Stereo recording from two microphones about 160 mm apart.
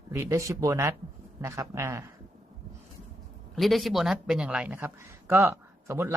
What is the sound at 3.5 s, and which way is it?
Speech, centre (ahead or behind).